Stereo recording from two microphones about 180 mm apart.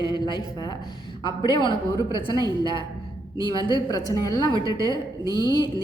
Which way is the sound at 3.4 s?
25° left (ahead or behind).